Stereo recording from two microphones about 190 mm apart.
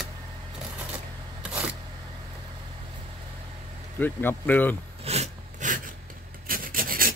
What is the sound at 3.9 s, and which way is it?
Speech, 10° left (ahead or behind).